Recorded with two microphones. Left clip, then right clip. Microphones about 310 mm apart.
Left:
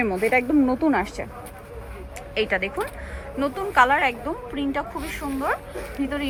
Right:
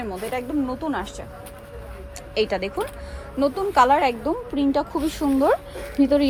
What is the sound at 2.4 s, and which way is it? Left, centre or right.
A woman's voice, centre.